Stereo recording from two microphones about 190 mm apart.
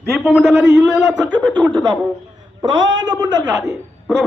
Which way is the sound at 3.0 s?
25° right (ahead or behind).